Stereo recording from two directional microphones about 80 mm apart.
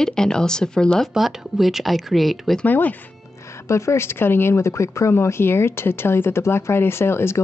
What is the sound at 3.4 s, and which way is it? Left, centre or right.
Speech, left.